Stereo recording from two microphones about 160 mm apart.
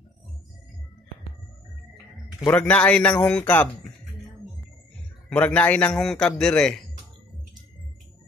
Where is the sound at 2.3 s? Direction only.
15° left (ahead or behind).